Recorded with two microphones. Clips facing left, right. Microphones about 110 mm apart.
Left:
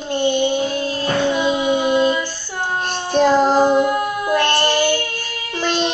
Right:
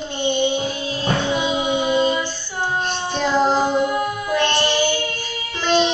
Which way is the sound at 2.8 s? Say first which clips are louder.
Left 6 dB; 45° left (ahead or behind).